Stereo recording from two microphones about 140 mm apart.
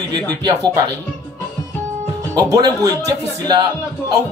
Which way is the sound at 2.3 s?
25° right (ahead or behind).